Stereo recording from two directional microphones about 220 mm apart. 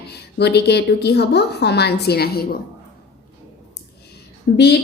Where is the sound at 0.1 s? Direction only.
50° left (ahead or behind).